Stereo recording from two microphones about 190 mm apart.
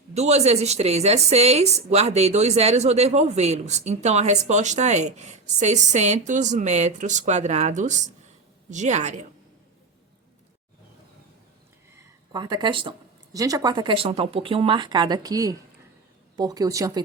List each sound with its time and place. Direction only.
0.1 s a woman's voice: 35° right (ahead or behind)
12.3 s speech: 25° right (ahead or behind)